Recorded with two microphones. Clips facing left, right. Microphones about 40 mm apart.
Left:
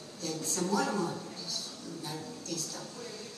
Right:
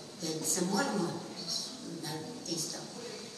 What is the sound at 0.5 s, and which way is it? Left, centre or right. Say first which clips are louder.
Speech: left 2 dB; left.